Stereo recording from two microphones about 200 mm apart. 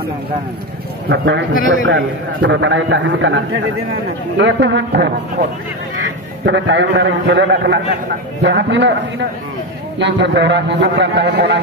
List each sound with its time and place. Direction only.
1.0 s a man's voice: 55° right (ahead or behind)
1.9 s a man's voice: 75° right (ahead or behind); by 5.1 s 55° right (ahead or behind)
6.4 s a man's voice: 65° right (ahead or behind)
9.9 s a man's voice: 60° right (ahead or behind)